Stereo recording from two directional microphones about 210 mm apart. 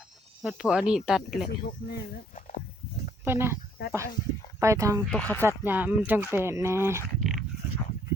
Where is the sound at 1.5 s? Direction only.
50° left (ahead or behind).